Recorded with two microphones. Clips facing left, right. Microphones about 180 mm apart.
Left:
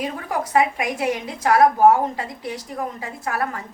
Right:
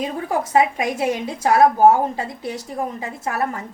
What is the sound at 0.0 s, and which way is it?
A woman's voice, 25° right (ahead or behind).